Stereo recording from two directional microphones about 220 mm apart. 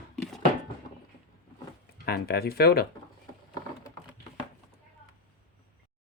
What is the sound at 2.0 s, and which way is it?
Speech, 45° left (ahead or behind).